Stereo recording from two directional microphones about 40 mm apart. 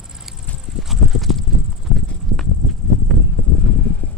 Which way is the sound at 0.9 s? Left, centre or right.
Centre.